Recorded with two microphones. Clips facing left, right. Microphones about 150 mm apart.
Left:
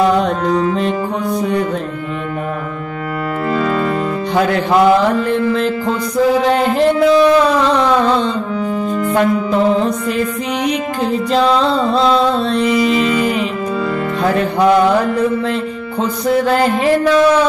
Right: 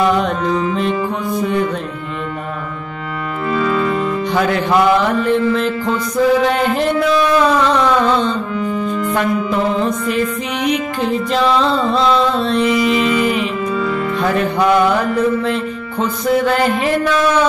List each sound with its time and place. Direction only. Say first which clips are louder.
0.0 s music: left 2 dB; 35° left (ahead or behind)
3.4 s music: right 1 dB; 50° left (ahead or behind)
4.4 s music: left 3 dB; 30° left (ahead or behind)